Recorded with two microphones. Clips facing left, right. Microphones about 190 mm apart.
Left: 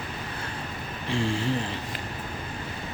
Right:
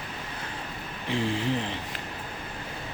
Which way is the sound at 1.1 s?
20° right (ahead or behind).